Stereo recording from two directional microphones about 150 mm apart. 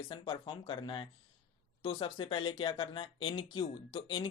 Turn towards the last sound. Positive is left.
turn(degrees=30)  # may be behind; listen again after turning